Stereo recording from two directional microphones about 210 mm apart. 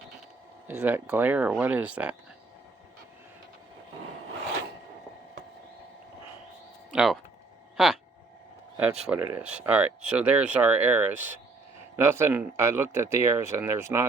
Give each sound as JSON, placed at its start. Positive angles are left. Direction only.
{"t": 0.7, "sound": "speech", "side_deg": -10}
{"t": 6.9, "sound": "speech", "side_deg": 0}
{"t": 8.8, "sound": "speech", "side_deg": -5}